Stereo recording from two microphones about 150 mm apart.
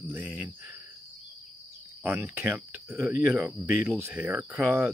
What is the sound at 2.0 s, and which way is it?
A man's voice, 15° right (ahead or behind).